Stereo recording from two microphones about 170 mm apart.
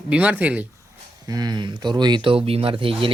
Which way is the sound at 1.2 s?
25° right (ahead or behind).